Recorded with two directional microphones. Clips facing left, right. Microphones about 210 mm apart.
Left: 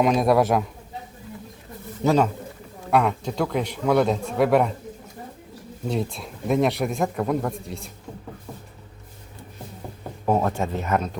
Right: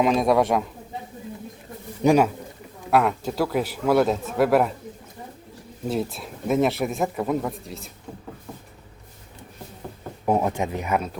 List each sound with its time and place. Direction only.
0.0 s speech: centre (ahead or behind)
2.0 s speech: 10° right (ahead or behind)
5.9 s speech: 5° right (ahead or behind)
10.2 s speech: 15° right (ahead or behind)